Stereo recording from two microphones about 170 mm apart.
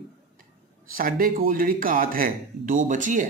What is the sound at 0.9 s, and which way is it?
A man's voice, 55° right (ahead or behind).